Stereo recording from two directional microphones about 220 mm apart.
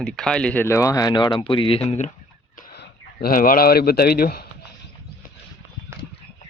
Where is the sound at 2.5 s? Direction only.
45° left (ahead or behind).